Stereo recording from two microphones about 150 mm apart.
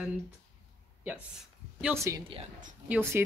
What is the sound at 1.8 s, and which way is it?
Speech, 20° right (ahead or behind).